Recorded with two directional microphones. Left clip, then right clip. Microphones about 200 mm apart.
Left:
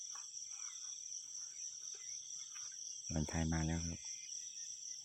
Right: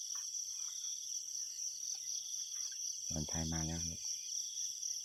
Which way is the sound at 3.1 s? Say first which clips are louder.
Left 2 dB; 25° left (ahead or behind).